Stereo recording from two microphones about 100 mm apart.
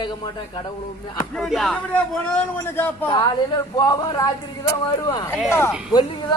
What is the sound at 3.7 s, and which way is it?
Speech, 45° left (ahead or behind).